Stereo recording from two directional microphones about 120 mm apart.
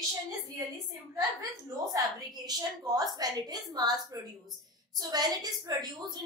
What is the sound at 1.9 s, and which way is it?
A woman's voice, 35° right (ahead or behind).